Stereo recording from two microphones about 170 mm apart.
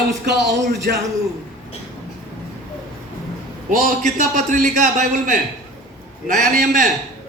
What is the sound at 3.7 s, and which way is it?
A man's voice, 50° right (ahead or behind).